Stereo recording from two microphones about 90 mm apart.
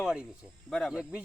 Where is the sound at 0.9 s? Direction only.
5° right (ahead or behind).